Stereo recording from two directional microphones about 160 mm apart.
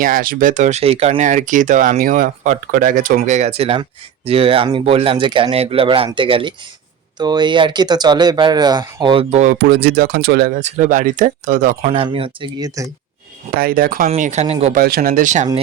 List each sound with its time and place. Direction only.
0.0 s speech: 60° right (ahead or behind); by 9.2 s 30° right (ahead or behind)
9.3 s speech: 50° right (ahead or behind)
9.6 s speech: 90° right; by 10.6 s 70° right (ahead or behind)
10.6 s speech: 45° right (ahead or behind)
11.8 s speech: 35° right (ahead or behind)
13.5 s speech: 65° right (ahead or behind)
14.2 s speech: 50° right (ahead or behind)
14.8 s speech: 65° right (ahead or behind)